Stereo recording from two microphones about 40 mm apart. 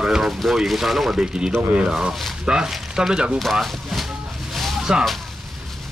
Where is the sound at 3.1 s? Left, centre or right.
Right.